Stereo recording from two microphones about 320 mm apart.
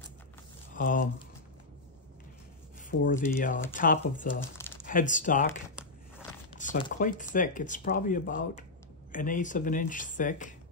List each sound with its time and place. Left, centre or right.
0.7 s speech: left
2.9 s speech: left
6.6 s speech: left